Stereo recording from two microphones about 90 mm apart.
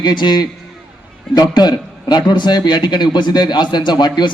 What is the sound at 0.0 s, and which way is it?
A man's voice, 55° left (ahead or behind).